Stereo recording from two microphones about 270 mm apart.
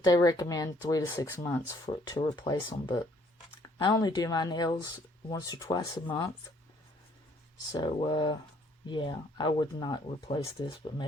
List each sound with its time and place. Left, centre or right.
0.0 s speech: centre
7.7 s speech: centre